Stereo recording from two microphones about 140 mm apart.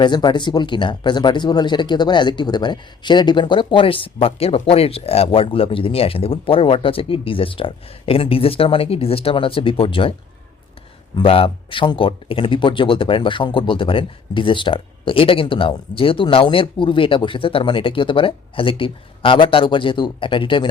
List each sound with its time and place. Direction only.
0.0 s speech: 35° left (ahead or behind)